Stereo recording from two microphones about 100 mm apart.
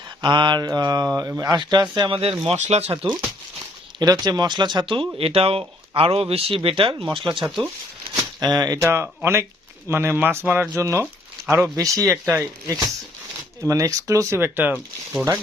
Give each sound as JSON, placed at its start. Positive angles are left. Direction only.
{"t": 0.2, "sound": "mantra", "side_deg": -50}
{"t": 1.4, "sound": "speech", "side_deg": -45}
{"t": 2.5, "sound": "speech", "side_deg": -90}
{"t": 3.0, "sound": "speech", "side_deg": -60}
{"t": 4.0, "sound": "speech", "side_deg": -40}
{"t": 8.1, "sound": "speech", "side_deg": -40}
{"t": 8.8, "sound": "speech", "side_deg": -25}
{"t": 10.8, "sound": "speech", "side_deg": -30}